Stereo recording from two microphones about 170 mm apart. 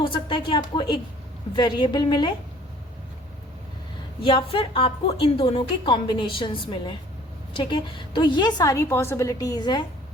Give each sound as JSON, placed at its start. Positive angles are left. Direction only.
{"t": 0.0, "sound": "a sound", "side_deg": 30}
{"t": 1.5, "sound": "a woman's voice", "side_deg": 25}
{"t": 4.2, "sound": "a woman's voice", "side_deg": 30}